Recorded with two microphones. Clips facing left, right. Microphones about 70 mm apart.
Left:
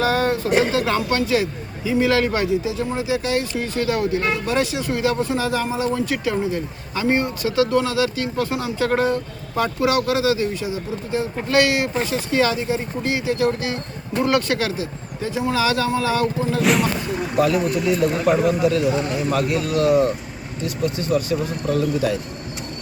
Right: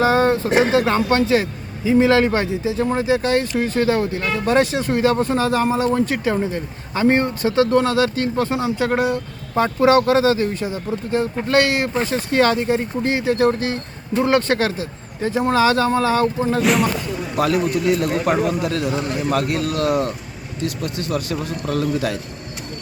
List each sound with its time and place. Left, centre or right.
0.0 s speech: right
8.9 s speech: centre
9.6 s speech: right
13.0 s speech: right
14.2 s speech: right
16.6 s speech: centre
17.4 s a man's voice: right
20.7 s speech: right